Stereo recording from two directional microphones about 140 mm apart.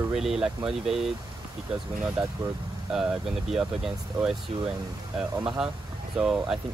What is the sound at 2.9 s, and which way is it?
Speech, 5° right (ahead or behind).